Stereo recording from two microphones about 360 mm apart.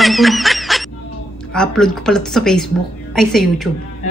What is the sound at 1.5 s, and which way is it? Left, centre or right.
A woman's voice, centre.